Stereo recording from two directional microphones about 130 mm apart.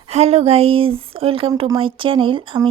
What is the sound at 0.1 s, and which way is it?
Speech, 55° right (ahead or behind).